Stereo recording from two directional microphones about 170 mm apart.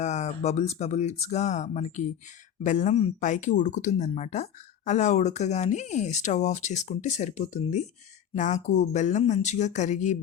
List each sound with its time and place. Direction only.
0.0 s speech: 40° left (ahead or behind)